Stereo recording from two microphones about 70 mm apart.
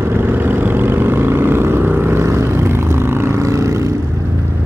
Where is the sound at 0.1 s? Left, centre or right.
Right.